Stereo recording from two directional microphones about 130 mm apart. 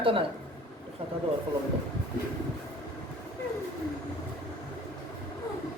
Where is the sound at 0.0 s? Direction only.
45° right (ahead or behind).